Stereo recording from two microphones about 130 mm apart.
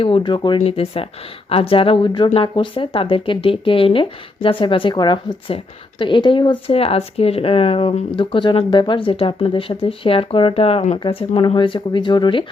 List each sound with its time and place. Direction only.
0.0 s speech: 40° left (ahead or behind)